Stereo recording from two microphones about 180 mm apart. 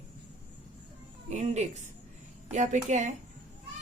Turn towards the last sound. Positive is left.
turn(degrees=-40)  # may be behind; listen again after turning